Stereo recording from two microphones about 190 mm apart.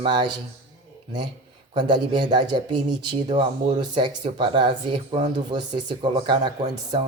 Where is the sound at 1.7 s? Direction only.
25° right (ahead or behind).